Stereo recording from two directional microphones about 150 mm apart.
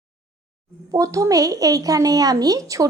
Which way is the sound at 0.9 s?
20° right (ahead or behind).